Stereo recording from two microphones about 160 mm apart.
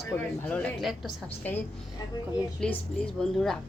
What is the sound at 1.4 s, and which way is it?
A woman's voice, 10° left (ahead or behind).